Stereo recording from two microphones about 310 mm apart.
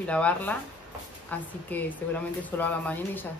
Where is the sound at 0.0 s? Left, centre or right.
Centre.